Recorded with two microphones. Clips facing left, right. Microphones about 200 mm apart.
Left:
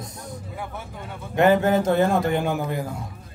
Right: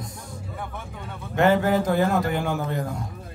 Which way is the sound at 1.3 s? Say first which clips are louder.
Left 2 dB; 15° left (ahead or behind).